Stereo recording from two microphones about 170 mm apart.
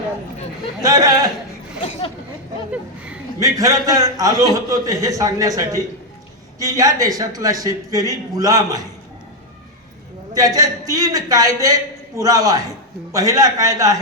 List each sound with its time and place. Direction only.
0.8 s a man's voice: 20° right (ahead or behind)
2.7 s a sound: 5° right (ahead or behind)
3.4 s a man's voice: 20° right (ahead or behind)
10.3 s a man's voice: 20° right (ahead or behind)